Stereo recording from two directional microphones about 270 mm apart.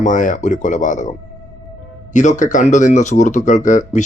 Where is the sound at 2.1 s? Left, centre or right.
Left.